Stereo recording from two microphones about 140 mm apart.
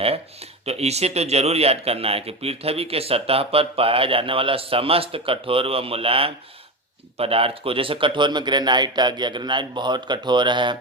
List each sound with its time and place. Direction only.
0.6 s speech: 50° right (ahead or behind); by 10.8 s 35° right (ahead or behind)